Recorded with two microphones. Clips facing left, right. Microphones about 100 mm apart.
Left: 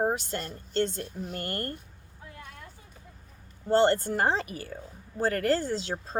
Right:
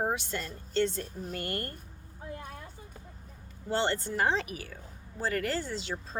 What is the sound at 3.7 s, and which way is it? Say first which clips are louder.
Speech: left 7 dB; 45° left (ahead or behind).